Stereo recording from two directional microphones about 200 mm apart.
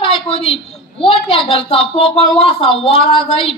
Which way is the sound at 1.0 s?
25° left (ahead or behind).